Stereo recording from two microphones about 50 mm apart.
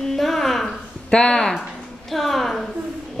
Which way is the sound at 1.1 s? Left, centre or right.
Centre.